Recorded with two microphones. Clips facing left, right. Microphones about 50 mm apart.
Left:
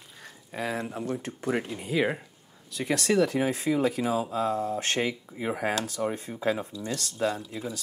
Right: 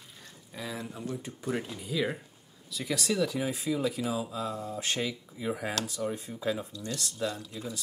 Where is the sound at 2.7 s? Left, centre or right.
Left.